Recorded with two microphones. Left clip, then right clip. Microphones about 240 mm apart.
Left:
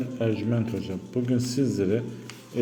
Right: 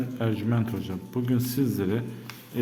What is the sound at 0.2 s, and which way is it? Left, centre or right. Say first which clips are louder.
A man's voice: left 3 dB; centre.